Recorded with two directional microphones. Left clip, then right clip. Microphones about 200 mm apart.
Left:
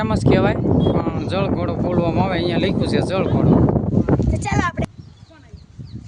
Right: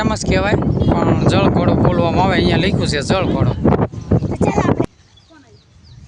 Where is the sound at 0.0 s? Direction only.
20° left (ahead or behind).